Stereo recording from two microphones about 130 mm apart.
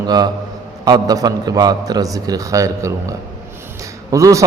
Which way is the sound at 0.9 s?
30° right (ahead or behind).